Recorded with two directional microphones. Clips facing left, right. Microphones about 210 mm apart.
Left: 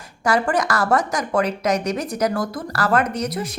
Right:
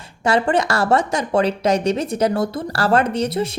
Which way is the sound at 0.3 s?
25° right (ahead or behind).